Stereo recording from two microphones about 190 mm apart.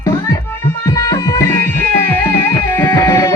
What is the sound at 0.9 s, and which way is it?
Music, 20° left (ahead or behind).